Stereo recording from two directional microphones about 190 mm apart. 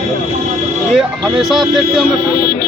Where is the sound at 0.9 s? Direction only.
Centre (ahead or behind).